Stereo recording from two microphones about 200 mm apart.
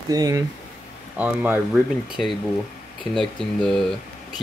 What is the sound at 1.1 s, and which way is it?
Speech, 5° right (ahead or behind).